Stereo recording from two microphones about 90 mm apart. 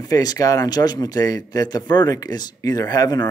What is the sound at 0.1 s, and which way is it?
Speech, 45° left (ahead or behind).